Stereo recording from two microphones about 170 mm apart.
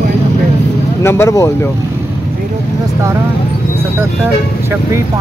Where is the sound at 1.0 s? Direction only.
15° left (ahead or behind).